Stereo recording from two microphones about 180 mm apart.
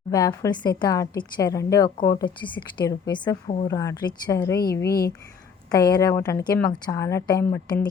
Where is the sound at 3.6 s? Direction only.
20° left (ahead or behind).